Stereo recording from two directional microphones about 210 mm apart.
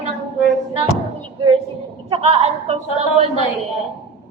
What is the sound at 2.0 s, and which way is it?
A woman's voice, 25° right (ahead or behind).